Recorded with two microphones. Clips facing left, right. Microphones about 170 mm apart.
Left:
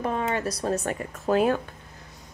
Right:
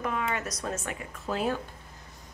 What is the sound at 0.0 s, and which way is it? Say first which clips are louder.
Speech: left 5 dB; 35° left (ahead or behind).